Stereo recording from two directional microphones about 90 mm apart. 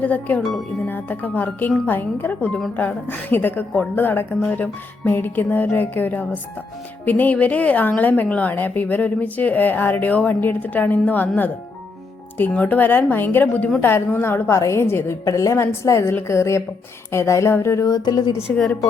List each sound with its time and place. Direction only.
0.0 s a woman's voice: 15° left (ahead or behind); by 18.3 s 55° left (ahead or behind)
18.5 s speech: 10° left (ahead or behind)